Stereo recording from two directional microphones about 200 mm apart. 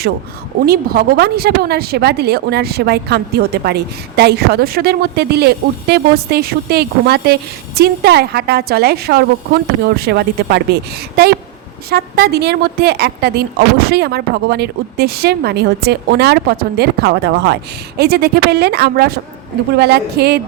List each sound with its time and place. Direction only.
0.6 s a woman's voice: 50° right (ahead or behind)
11.9 s a woman's voice: 50° right (ahead or behind)